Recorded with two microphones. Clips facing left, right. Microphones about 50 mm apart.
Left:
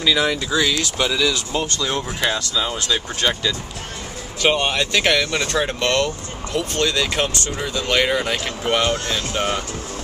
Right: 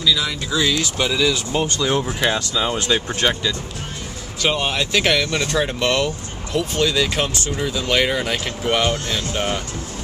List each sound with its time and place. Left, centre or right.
0.0 s speech: left
0.6 s speech: centre
1.5 s speech: centre
2.3 s speech: centre
4.4 s speech: centre